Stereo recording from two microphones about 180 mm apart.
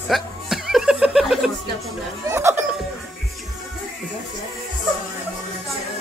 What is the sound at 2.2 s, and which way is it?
Speech, 15° right (ahead or behind).